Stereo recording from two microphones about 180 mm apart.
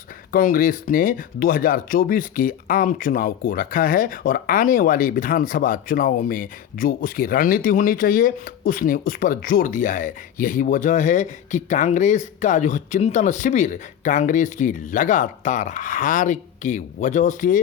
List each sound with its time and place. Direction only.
0.3 s speech: 50° left (ahead or behind)